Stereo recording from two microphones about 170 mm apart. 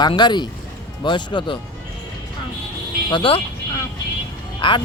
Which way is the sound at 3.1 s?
30° left (ahead or behind).